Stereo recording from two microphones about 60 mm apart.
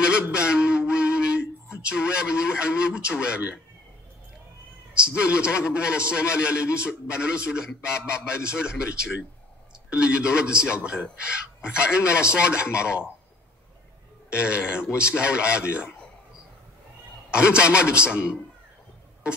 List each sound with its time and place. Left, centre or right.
0.0 s a sound: centre
1.7 s speech: centre
4.9 s a man's voice: centre
14.3 s a man's voice: centre
17.3 s a man's voice: centre